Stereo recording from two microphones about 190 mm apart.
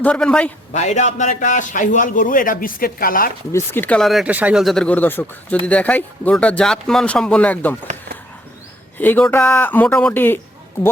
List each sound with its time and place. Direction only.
0.0 s speech: 5° left (ahead or behind)
0.7 s a man's voice: 40° left (ahead or behind)
3.5 s speech: 10° left (ahead or behind)
9.0 s speech: 10° left (ahead or behind)